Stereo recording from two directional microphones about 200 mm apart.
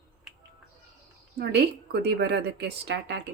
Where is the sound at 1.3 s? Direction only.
55° right (ahead or behind).